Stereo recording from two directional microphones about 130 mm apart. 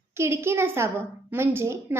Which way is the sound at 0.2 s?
20° right (ahead or behind).